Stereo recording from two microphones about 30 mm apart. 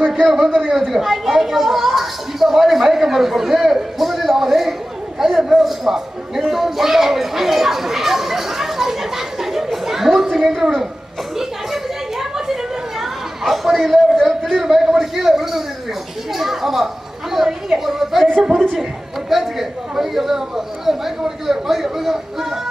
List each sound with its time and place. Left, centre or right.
0.2 s a woman's voice: centre
5.6 s a sound: centre
9.8 s chatter: centre
10.5 s a woman's voice: centre
11.3 s a sound: centre
13.0 s chatter: centre
14.5 s a man's voice: centre
16.3 s a sound: centre
18.4 s a woman's voice: centre
18.8 s a woman's voice: centre